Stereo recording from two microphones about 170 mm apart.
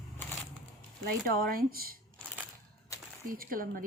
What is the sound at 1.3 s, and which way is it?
Speech, 60° right (ahead or behind).